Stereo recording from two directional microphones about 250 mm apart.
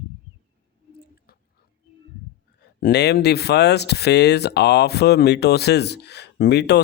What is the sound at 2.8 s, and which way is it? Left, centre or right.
Speech, left.